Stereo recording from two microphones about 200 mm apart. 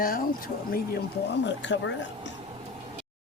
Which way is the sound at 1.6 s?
65° left (ahead or behind).